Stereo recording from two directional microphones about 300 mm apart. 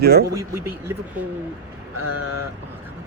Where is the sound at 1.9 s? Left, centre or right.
Right.